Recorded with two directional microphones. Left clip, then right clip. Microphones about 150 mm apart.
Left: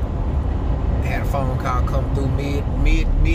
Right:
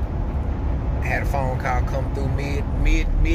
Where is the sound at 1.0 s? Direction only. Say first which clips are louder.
Right 1 dB; centre (ahead or behind).